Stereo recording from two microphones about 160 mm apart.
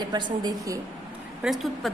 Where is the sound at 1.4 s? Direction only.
Centre (ahead or behind).